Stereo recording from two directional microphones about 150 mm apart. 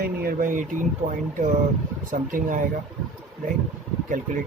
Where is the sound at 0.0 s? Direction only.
85° right; by 0.8 s 60° right (ahead or behind).